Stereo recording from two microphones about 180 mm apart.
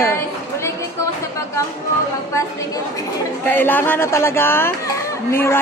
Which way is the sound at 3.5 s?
10° left (ahead or behind).